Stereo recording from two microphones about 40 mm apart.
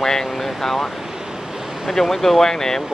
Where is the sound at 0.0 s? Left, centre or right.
Centre.